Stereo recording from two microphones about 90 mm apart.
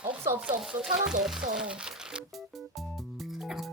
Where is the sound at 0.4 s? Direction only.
10° right (ahead or behind).